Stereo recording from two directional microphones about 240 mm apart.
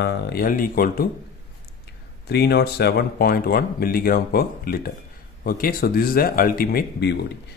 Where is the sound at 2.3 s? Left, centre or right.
Left.